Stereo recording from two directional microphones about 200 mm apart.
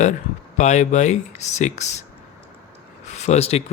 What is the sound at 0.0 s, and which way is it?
Speech, 35° left (ahead or behind).